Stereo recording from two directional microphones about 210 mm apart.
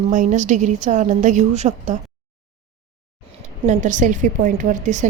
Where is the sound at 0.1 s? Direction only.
35° right (ahead or behind).